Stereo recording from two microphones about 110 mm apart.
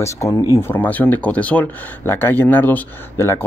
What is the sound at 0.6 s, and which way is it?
Speech, 20° left (ahead or behind).